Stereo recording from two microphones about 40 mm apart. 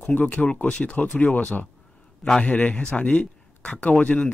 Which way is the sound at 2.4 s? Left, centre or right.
Left.